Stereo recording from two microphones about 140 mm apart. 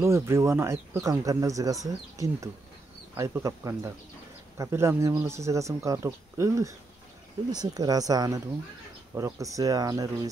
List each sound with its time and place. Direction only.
0.0 s speech: 20° right (ahead or behind)